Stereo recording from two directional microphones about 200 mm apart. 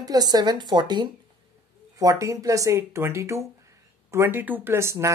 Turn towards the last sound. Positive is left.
turn(degrees=-15)  # may be behind; listen again after turning